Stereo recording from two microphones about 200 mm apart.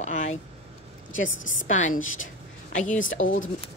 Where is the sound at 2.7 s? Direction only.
40° left (ahead or behind).